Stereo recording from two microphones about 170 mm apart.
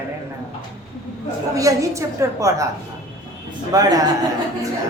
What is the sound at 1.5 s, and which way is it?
A woman's voice, 20° right (ahead or behind).